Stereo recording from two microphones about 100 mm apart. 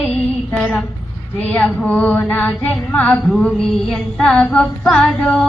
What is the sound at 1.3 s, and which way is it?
A woman's voice, 15° left (ahead or behind).